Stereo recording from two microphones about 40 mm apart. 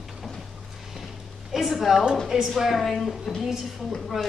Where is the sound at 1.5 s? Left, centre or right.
Centre.